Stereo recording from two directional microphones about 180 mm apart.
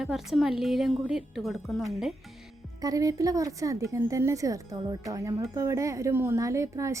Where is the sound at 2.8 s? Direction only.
20° right (ahead or behind).